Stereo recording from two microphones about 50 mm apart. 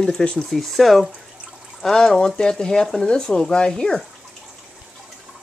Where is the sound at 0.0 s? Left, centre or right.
Centre.